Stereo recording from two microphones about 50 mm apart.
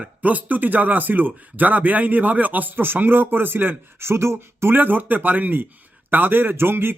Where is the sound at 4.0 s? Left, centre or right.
Right.